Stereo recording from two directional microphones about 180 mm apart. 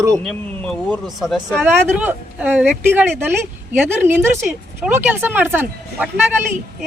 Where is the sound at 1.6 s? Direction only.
10° right (ahead or behind).